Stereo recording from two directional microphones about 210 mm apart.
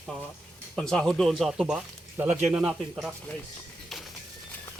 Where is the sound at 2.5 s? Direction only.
5° right (ahead or behind).